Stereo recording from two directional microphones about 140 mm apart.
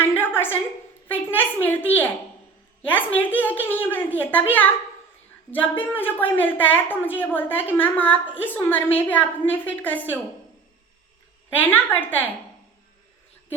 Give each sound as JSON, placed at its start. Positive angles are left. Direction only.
{"t": 0.0, "sound": "a sound", "side_deg": 15}
{"t": 1.0, "sound": "a woman's voice", "side_deg": 15}
{"t": 11.5, "sound": "a woman's voice", "side_deg": 15}